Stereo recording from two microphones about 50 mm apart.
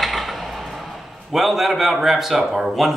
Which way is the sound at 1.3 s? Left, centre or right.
Centre.